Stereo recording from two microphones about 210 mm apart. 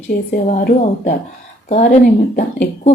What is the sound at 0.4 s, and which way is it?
A woman's voice, 35° left (ahead or behind).